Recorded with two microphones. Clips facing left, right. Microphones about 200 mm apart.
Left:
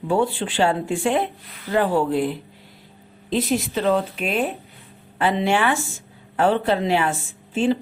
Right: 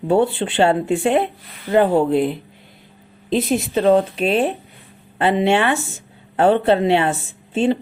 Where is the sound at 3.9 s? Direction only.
30° right (ahead or behind).